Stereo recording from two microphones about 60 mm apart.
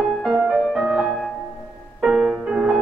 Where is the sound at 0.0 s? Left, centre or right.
Centre.